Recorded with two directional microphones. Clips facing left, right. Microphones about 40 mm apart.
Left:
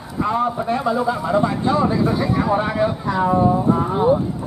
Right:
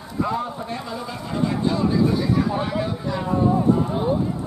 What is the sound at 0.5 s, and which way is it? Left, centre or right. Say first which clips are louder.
Speech: left 9 dB; left.